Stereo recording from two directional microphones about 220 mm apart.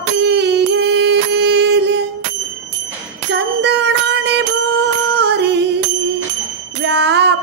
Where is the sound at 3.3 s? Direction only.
50° right (ahead or behind).